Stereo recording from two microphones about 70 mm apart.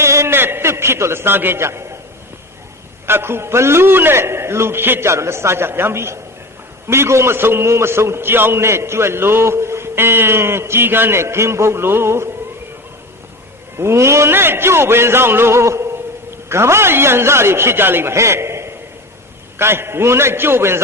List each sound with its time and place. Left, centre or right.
0.0 s a sound: right
3.1 s a man's voice: right
13.7 s a man's voice: right